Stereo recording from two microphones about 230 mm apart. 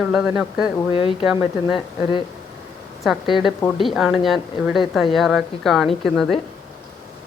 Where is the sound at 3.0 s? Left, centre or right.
Centre.